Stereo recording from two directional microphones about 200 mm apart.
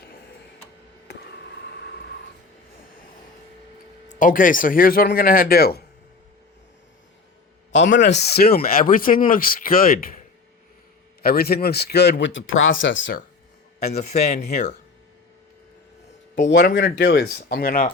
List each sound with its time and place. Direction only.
1.0 s a sound: 55° left (ahead or behind)
4.1 s speech: 40° left (ahead or behind)
8.0 s speech: 55° left (ahead or behind)
11.2 s speech: 50° left (ahead or behind); by 13.1 s 70° left (ahead or behind)
13.8 s speech: 35° left (ahead or behind)
16.6 s speech: 45° left (ahead or behind)